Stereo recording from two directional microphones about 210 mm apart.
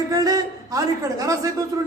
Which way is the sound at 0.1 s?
15° right (ahead or behind).